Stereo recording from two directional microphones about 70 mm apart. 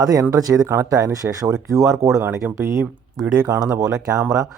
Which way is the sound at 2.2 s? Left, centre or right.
Right.